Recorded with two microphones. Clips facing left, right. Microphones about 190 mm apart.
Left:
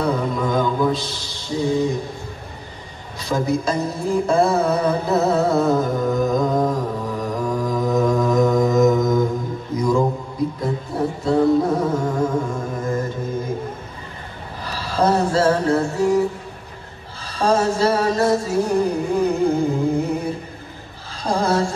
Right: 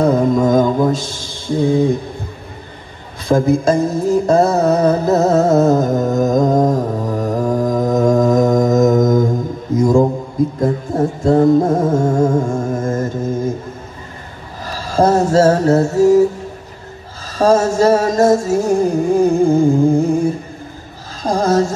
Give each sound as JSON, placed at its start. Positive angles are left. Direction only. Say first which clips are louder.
{"t": 0.0, "sound": "music", "louder": "right 8 dB", "side_deg": -45}
{"t": 3.3, "sound": "a sound", "louder": "right 8 dB", "side_deg": -50}
{"t": 9.8, "sound": "mantra", "louder": "right 7 dB", "side_deg": -45}
{"t": 10.6, "sound": "music", "louder": "right 6 dB", "side_deg": -45}
{"t": 14.6, "sound": "a sound", "louder": "right 5 dB", "side_deg": -45}
{"t": 17.3, "sound": "music", "louder": "right 5 dB", "side_deg": -45}